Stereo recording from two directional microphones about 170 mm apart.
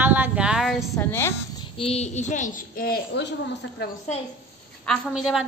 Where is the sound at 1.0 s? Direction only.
15° left (ahead or behind).